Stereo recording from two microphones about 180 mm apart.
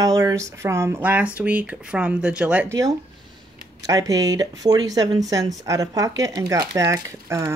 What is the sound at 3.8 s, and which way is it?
Speech, 20° right (ahead or behind).